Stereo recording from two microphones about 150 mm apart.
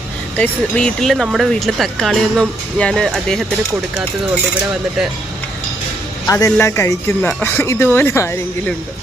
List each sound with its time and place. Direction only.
0.3 s speech: 10° left (ahead or behind)
6.2 s speech: 20° left (ahead or behind)